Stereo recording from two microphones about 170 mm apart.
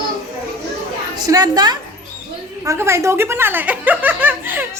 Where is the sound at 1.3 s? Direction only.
20° right (ahead or behind).